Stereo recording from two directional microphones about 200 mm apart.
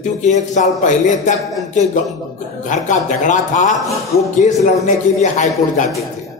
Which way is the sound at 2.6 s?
40° left (ahead or behind).